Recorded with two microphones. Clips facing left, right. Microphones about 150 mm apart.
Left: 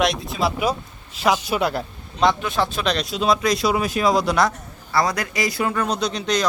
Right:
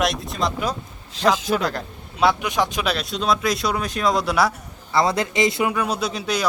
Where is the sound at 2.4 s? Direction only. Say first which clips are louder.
Even; 15° right (ahead or behind).